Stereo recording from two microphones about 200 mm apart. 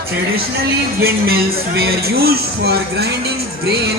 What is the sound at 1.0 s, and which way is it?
Speech, 50° right (ahead or behind).